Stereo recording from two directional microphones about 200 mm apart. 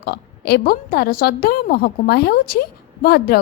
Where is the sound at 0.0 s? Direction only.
55° left (ahead or behind).